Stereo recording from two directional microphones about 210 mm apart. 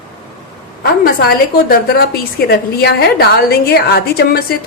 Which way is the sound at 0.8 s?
45° left (ahead or behind).